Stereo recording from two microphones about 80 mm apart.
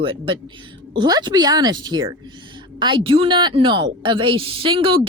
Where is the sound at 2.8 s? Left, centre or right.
Right.